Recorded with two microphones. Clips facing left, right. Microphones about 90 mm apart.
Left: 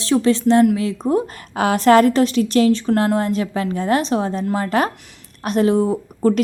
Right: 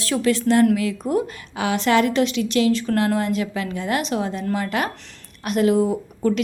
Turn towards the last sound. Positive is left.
turn(degrees=35)  # may be behind; listen again after turning